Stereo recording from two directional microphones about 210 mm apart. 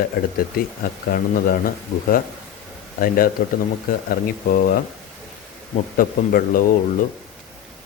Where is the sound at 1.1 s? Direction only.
45° left (ahead or behind).